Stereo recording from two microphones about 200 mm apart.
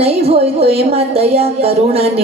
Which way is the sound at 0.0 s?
30° right (ahead or behind).